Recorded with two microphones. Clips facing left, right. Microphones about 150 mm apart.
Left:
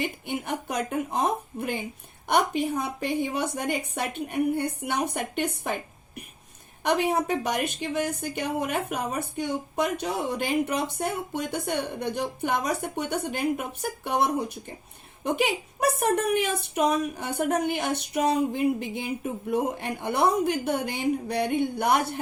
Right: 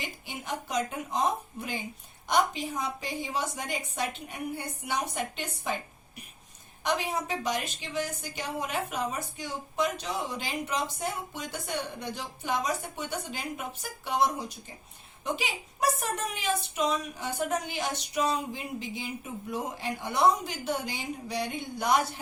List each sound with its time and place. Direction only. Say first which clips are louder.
0.0 s a woman's voice: left 9 dB; 60° left (ahead or behind)